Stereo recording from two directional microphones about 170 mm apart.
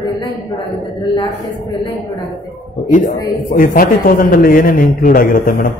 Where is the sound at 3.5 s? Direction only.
55° left (ahead or behind).